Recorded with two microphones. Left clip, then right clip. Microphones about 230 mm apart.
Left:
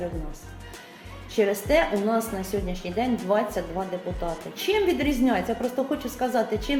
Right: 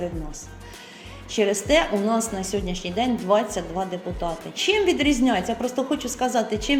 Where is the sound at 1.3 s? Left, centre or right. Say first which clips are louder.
Right 2 dB; right.